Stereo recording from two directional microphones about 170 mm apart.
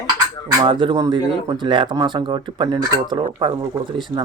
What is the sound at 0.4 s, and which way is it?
Speech, 30° right (ahead or behind).